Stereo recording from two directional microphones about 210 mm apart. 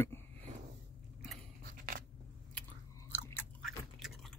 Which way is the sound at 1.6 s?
40° right (ahead or behind).